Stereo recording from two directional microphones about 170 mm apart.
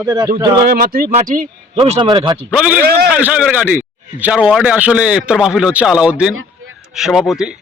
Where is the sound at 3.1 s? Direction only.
10° right (ahead or behind).